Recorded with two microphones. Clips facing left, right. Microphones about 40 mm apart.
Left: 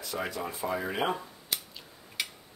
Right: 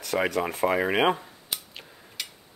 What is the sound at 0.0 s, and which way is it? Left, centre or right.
Speech, right.